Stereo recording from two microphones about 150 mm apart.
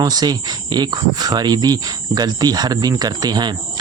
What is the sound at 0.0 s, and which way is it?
Speech, 25° right (ahead or behind).